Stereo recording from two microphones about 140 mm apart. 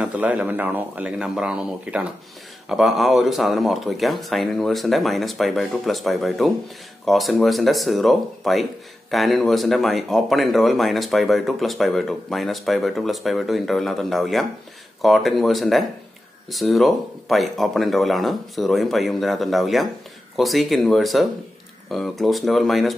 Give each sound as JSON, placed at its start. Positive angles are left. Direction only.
{"t": 0.0, "sound": "speech", "side_deg": -10}